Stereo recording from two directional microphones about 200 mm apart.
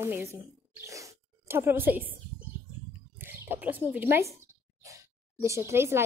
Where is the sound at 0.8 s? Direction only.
15° right (ahead or behind).